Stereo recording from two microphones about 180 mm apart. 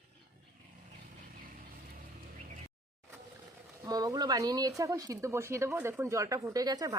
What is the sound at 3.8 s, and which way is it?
Speech, 20° right (ahead or behind).